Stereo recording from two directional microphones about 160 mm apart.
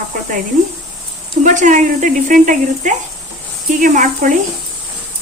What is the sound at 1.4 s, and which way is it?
A woman's voice, 50° right (ahead or behind).